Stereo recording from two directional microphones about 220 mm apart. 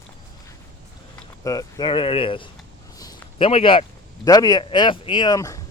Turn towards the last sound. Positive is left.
turn(degrees=15)  # may be behind; listen again after turning